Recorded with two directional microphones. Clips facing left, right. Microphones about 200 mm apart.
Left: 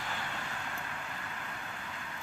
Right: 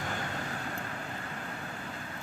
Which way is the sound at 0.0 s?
45° right (ahead or behind).